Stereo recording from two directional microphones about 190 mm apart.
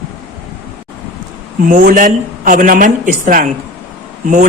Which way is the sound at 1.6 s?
45° right (ahead or behind).